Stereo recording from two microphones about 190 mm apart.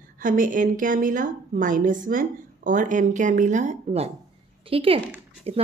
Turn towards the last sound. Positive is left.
turn(degrees=-30)  # may be behind; listen again after turning